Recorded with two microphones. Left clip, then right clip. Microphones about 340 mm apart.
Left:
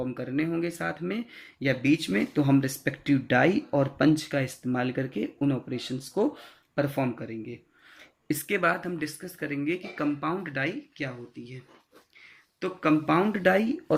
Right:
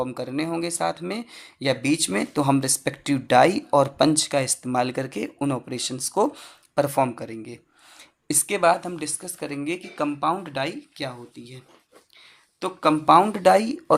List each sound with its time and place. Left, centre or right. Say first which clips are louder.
0.0 s speech: right 3 dB; centre